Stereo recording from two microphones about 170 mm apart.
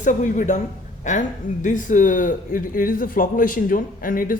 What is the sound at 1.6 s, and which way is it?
A man's voice, 50° left (ahead or behind).